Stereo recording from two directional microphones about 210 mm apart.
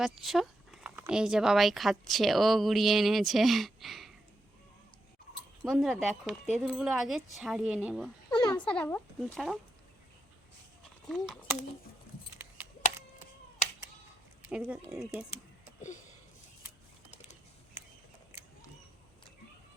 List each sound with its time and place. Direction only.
0.0 s speech: centre (ahead or behind)
5.6 s speech: 5° right (ahead or behind)
8.3 s a sound: 20° left (ahead or behind)
8.6 s speech: 5° left (ahead or behind)
11.1 s speech: centre (ahead or behind)
14.4 s speech: 5° right (ahead or behind)